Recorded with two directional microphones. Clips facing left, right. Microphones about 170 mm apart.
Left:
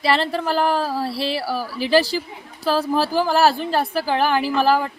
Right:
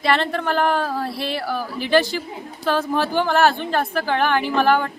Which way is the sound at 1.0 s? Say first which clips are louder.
Left 2 dB; 30° left (ahead or behind).